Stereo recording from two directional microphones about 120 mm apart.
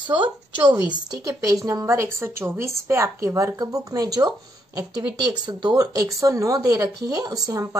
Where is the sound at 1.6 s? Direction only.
25° right (ahead or behind).